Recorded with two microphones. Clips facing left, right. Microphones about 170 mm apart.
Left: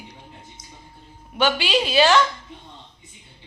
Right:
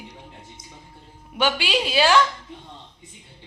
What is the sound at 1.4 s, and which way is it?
Speech, 10° right (ahead or behind).